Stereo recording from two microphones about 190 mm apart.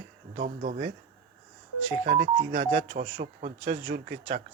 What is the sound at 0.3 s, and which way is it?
Speech, 45° right (ahead or behind).